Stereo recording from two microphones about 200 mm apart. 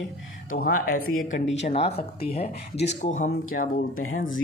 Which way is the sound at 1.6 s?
30° left (ahead or behind).